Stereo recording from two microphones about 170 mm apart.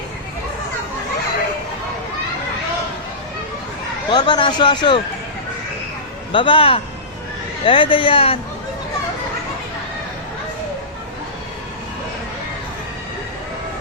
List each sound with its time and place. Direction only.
4.1 s speech: 25° left (ahead or behind)
6.3 s a man's voice: 30° left (ahead or behind)